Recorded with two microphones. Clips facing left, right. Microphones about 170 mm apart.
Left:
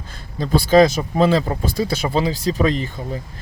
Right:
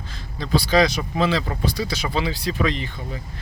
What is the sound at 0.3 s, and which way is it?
Speech, 45° left (ahead or behind).